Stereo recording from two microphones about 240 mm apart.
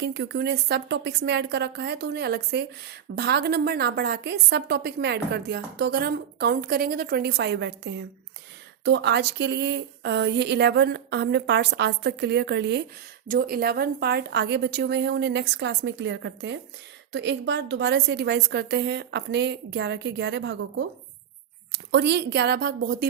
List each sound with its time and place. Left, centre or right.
0.0 s a woman's voice: right